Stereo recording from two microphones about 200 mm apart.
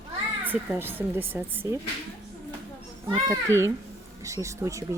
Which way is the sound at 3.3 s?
15° right (ahead or behind).